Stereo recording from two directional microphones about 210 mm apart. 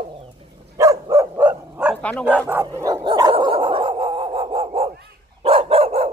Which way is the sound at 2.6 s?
15° right (ahead or behind).